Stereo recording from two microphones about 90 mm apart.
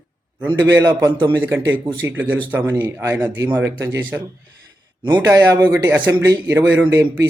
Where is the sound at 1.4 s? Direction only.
30° right (ahead or behind).